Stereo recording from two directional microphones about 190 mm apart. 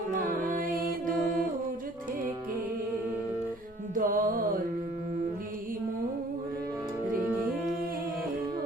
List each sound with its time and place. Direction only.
0.1 s music: 45° right (ahead or behind)
3.9 s music: 45° right (ahead or behind)